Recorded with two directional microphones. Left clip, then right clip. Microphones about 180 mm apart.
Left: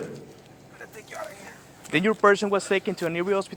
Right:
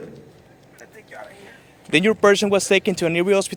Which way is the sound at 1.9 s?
90° right.